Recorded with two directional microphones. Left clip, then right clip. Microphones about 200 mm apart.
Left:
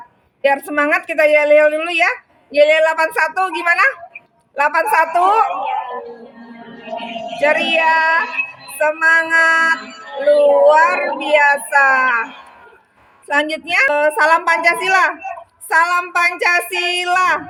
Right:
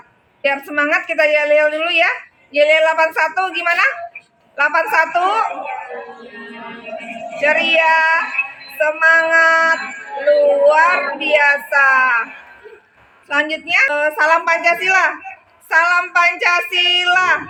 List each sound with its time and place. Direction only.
0.4 s a woman's voice: 60° left (ahead or behind)
7.4 s a woman's voice: 60° left (ahead or behind)
13.2 s a woman's voice: 60° left (ahead or behind)